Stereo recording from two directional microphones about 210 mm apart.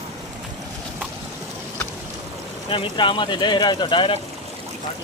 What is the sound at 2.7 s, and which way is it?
Speech, 25° left (ahead or behind).